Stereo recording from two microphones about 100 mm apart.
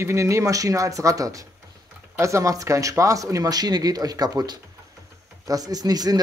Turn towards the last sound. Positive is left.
turn(degrees=-40)  # may be behind; listen again after turning